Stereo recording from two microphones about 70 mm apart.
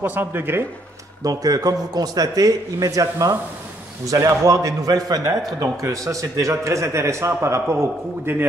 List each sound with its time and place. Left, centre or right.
0.0 s speech: right
1.2 s a man's voice: right